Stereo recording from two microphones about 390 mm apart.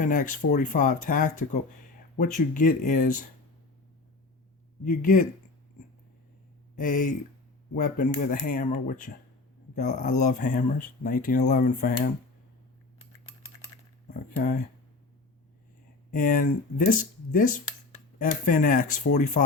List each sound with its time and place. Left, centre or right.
0.0 s speech: centre
4.9 s speech: centre
6.7 s speech: centre
16.1 s speech: centre